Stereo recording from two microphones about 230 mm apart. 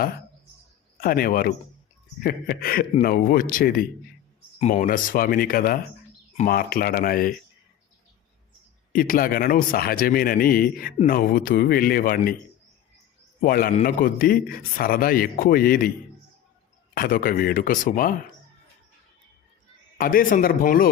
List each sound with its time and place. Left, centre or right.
0.9 s a man's voice: left
8.9 s a man's voice: left
13.4 s a man's voice: left
16.9 s a man's voice: left
20.0 s a man's voice: left